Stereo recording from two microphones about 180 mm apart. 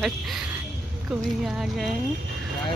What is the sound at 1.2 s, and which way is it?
Speech, centre (ahead or behind).